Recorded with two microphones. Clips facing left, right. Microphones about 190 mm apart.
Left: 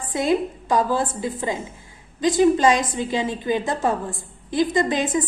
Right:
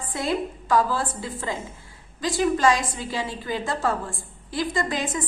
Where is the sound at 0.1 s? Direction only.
20° left (ahead or behind).